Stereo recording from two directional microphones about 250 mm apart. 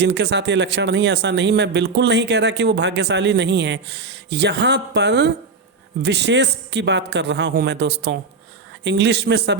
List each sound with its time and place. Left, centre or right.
0.0 s speech: right